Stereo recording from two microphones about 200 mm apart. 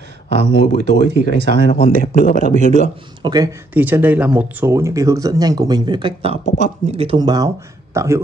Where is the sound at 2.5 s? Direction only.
40° right (ahead or behind).